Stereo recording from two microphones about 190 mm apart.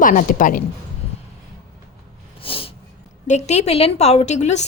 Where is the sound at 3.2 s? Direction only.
35° left (ahead or behind).